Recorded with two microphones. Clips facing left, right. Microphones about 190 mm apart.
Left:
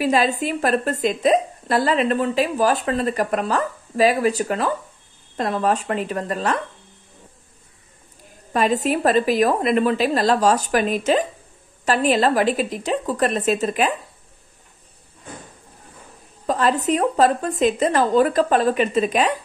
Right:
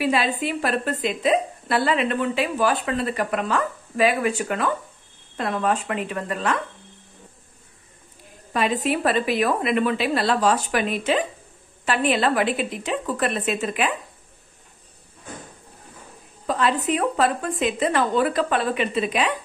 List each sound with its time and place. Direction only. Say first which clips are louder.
0.0 s speech: left 3 dB; 40° left (ahead or behind)
8.5 s speech: left 3 dB; 45° left (ahead or behind)
16.4 s speech: left 3 dB; 40° left (ahead or behind)